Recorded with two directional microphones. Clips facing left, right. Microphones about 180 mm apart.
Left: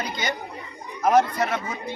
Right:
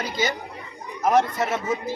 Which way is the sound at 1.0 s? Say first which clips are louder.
Left 1 dB; centre (ahead or behind).